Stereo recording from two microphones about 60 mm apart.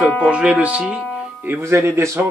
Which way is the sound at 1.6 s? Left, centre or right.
Right.